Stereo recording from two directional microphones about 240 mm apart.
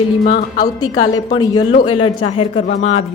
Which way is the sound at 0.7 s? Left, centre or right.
Centre.